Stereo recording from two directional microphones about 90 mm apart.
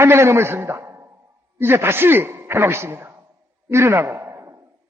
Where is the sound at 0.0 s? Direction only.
30° right (ahead or behind).